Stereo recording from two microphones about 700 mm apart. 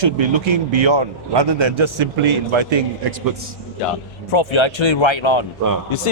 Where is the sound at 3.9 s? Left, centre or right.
Left.